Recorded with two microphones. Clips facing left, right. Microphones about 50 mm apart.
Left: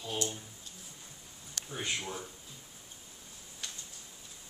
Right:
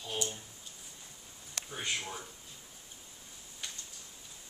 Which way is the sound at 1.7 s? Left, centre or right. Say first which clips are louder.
Left 1 dB; centre.